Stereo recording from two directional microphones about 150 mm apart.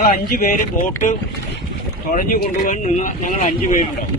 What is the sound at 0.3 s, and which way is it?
Speech, 70° left (ahead or behind).